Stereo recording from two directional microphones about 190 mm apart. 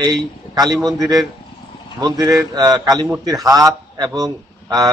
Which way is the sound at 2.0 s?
20° right (ahead or behind).